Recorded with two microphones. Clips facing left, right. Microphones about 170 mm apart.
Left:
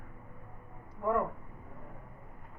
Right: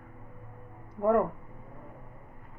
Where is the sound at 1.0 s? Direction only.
50° right (ahead or behind).